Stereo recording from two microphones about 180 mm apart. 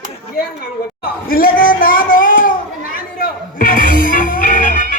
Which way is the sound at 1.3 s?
55° left (ahead or behind).